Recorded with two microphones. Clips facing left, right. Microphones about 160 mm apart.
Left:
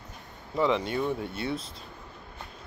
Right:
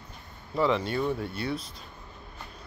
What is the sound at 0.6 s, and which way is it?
Speech, 20° left (ahead or behind).